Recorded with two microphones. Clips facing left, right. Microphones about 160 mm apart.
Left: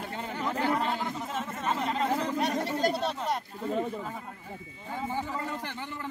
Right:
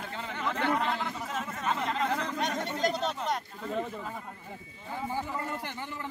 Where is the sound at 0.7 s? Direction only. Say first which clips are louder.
Left 1 dB; 5° left (ahead or behind).